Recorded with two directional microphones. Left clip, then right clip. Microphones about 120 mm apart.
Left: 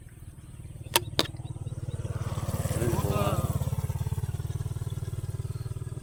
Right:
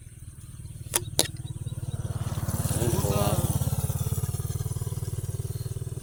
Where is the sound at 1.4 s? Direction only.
40° right (ahead or behind).